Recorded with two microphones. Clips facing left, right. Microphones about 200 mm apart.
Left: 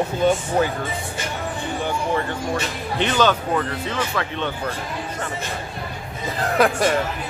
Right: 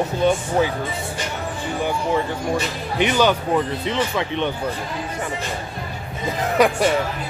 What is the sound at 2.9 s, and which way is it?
Speech, 10° right (ahead or behind).